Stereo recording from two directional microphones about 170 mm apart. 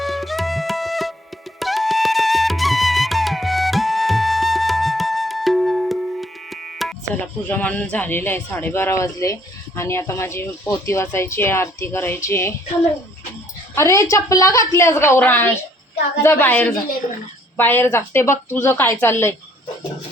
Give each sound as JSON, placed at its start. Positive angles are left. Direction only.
{"t": 0.0, "sound": "music", "side_deg": 0}
{"t": 7.1, "sound": "speech", "side_deg": 10}
{"t": 13.7, "sound": "speech", "side_deg": 15}